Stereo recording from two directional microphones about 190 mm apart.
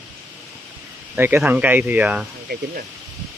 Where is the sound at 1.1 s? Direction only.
10° right (ahead or behind).